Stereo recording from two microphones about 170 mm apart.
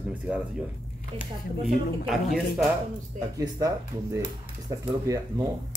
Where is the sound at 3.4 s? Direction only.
20° right (ahead or behind).